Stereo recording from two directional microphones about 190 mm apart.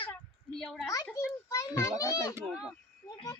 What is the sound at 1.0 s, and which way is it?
A child's voice, 15° left (ahead or behind).